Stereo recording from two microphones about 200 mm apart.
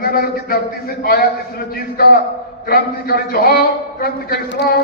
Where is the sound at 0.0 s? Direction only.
50° left (ahead or behind).